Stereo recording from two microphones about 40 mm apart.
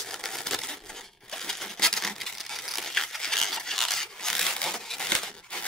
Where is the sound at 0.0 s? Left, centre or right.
Centre.